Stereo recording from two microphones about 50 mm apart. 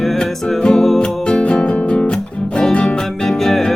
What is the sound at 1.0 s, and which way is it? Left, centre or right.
Music, centre.